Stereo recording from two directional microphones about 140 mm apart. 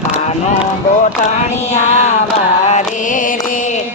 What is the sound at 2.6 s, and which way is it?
Music, 60° left (ahead or behind).